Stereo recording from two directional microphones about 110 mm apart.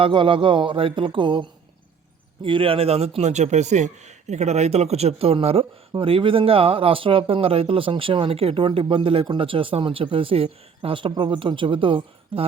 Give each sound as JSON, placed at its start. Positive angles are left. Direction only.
{"t": 0.0, "sound": "speech", "side_deg": -50}